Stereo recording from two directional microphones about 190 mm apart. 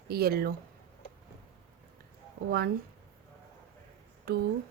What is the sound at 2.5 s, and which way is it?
Speech, 55° right (ahead or behind).